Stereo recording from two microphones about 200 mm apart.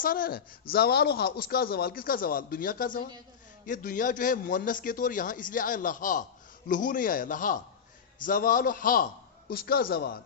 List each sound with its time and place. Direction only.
0.0 s a man's voice: 45° left (ahead or behind)